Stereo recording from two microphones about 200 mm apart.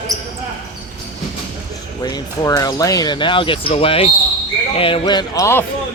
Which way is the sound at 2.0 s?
20° left (ahead or behind).